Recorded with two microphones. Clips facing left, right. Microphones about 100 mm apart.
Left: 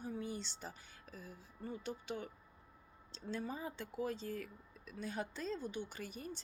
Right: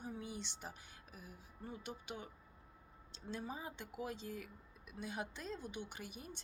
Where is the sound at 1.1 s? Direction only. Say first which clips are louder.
Left 4 dB; 15° right (ahead or behind).